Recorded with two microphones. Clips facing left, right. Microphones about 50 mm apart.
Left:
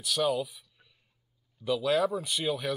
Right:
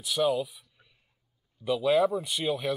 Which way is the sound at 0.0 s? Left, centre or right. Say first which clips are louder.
Right 2 dB; centre.